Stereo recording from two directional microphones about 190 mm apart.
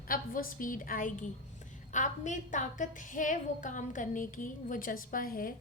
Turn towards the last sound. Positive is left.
turn(degrees=50)  # may be behind; listen again after turning